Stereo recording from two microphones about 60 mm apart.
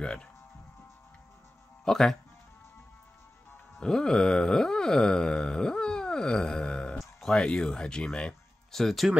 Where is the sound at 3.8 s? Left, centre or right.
Centre.